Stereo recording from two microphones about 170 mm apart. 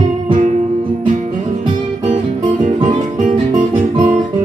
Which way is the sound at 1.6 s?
45° right (ahead or behind).